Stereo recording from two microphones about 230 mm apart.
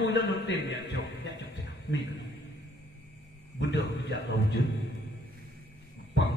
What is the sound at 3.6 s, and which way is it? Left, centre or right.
Speech, left.